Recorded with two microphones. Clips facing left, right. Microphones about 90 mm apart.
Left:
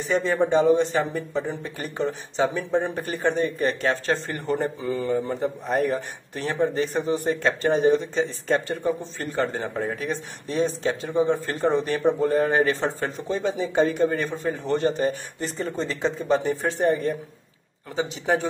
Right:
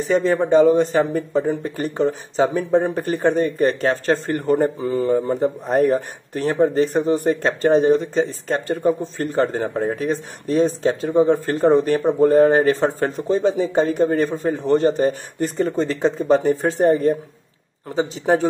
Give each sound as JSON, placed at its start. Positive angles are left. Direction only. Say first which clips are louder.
{"t": 0.0, "sound": "speech", "louder": "right 4 dB", "side_deg": -40}